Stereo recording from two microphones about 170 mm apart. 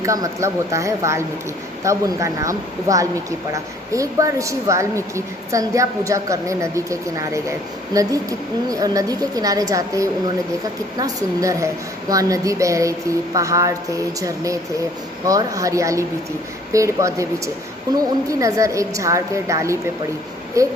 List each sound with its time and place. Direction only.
0.0 s a woman's voice: 20° right (ahead or behind)